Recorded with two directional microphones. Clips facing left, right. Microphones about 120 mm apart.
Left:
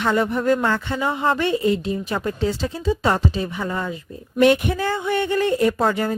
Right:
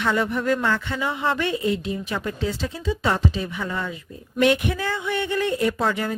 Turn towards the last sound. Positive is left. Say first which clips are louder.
# left 3 dB
turn(degrees=40)  # may be behind; listen again after turning